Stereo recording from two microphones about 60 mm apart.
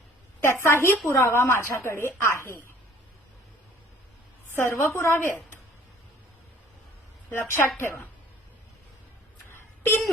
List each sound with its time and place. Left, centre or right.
0.6 s speech: left
4.5 s a woman's voice: left
7.3 s speech: left
9.5 s a sound: left